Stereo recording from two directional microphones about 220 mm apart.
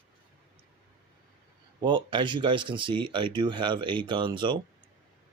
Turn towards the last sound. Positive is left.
turn(degrees=-20)  # may be behind; listen again after turning